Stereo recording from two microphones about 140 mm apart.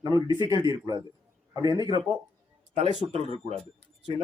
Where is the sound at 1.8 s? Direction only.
35° right (ahead or behind).